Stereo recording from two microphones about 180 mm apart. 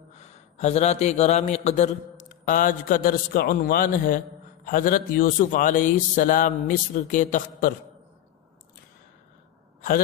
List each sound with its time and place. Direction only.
0.2 s a man's voice: 40° left (ahead or behind)